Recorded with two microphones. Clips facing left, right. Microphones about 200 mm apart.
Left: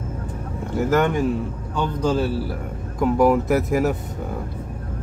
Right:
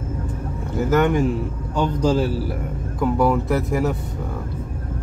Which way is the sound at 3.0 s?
15° left (ahead or behind).